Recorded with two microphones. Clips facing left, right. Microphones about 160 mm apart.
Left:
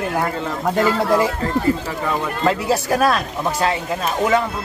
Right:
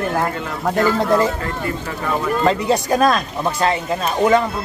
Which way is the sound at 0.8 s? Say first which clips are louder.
Right 1 dB; 10° left (ahead or behind).